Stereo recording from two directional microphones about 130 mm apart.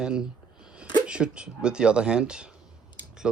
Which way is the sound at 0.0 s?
5° right (ahead or behind).